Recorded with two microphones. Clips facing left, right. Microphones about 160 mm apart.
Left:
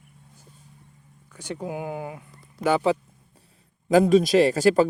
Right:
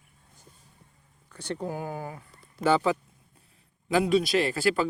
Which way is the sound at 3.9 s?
40° left (ahead or behind).